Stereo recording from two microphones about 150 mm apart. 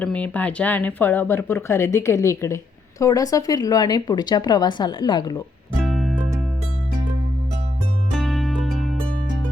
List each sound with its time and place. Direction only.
0.0 s speech: 10° left (ahead or behind); by 5.4 s 30° left (ahead or behind)
5.8 s music: centre (ahead or behind)
8.1 s music: centre (ahead or behind)